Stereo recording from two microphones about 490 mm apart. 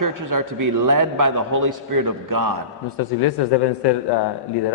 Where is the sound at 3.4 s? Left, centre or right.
Left.